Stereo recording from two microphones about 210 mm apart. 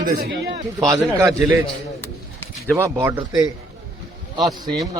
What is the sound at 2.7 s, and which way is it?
Speech, 10° right (ahead or behind).